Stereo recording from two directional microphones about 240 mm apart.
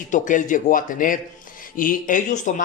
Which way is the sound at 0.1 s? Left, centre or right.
Left.